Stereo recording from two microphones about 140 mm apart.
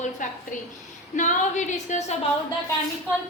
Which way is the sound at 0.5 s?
65° left (ahead or behind).